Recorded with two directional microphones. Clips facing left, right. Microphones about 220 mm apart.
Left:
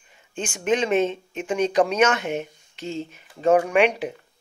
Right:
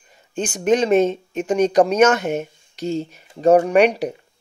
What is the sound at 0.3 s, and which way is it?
Speech, 40° right (ahead or behind).